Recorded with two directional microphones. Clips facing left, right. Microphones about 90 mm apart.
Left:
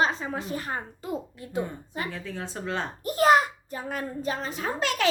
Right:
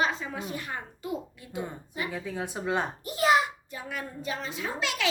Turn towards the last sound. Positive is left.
turn(degrees=45)  # may be behind; listen again after turning